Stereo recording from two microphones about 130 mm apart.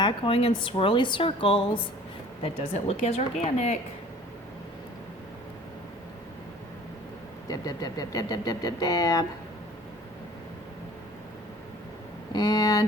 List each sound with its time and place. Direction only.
0.0 s a woman's voice: 40° left (ahead or behind)
2.4 s a woman's voice: 50° left (ahead or behind)
7.4 s speech: 30° left (ahead or behind)
12.3 s speech: 30° left (ahead or behind)